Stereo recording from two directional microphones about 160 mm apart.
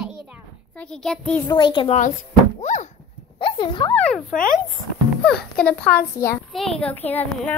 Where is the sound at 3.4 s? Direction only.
30° left (ahead or behind).